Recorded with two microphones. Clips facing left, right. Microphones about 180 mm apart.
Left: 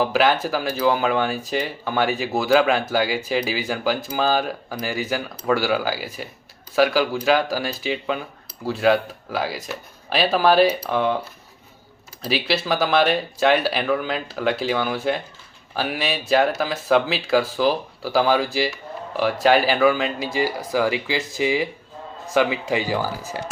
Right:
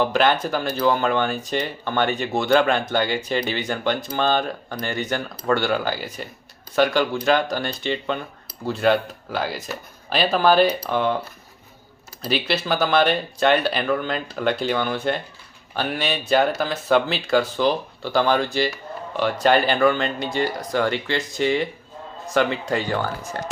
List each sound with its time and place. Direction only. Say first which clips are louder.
0.0 s speech: even; 5° left (ahead or behind)
12.2 s speech: even; centre (ahead or behind)